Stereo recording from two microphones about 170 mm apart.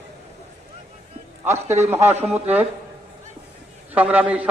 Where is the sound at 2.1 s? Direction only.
40° right (ahead or behind).